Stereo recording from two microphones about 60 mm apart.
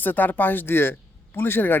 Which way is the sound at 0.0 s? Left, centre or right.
Left.